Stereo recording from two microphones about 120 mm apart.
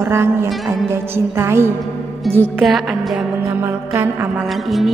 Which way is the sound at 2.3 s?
Centre (ahead or behind).